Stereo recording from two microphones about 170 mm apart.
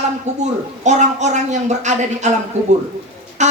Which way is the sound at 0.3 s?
45° right (ahead or behind).